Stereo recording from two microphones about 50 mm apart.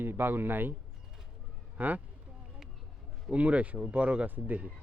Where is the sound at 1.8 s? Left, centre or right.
Right.